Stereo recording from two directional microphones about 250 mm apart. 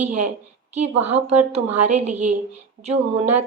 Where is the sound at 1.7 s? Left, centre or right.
Right.